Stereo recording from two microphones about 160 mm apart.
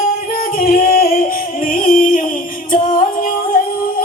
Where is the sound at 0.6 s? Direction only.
65° left (ahead or behind).